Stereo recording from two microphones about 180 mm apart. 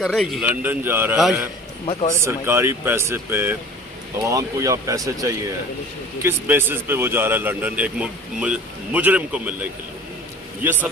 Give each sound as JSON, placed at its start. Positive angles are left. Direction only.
{"t": 0.0, "sound": "a man's voice", "side_deg": 0}
{"t": 1.9, "sound": "speech", "side_deg": 35}
{"t": 2.2, "sound": "a man's voice", "side_deg": -15}